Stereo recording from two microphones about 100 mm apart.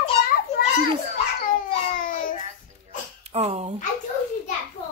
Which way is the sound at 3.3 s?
90° right.